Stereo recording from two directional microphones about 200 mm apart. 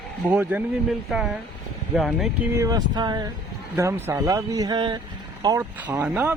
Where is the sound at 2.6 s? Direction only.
20° right (ahead or behind).